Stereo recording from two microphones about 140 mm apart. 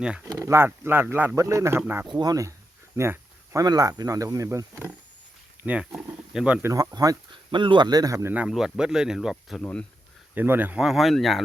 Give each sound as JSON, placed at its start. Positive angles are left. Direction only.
{"t": 0.0, "sound": "speech", "side_deg": -5}
{"t": 0.3, "sound": "a man's voice", "side_deg": -20}
{"t": 2.0, "sound": "a man's voice", "side_deg": -30}
{"t": 6.7, "sound": "speech", "side_deg": -25}
{"t": 10.3, "sound": "speech", "side_deg": -15}